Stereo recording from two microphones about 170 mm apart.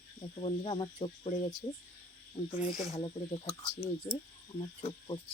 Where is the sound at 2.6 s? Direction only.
45° left (ahead or behind).